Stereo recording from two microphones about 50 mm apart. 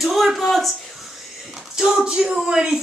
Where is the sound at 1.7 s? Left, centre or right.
Centre.